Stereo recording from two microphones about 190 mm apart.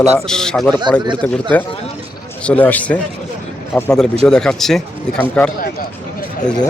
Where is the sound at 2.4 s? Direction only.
10° left (ahead or behind).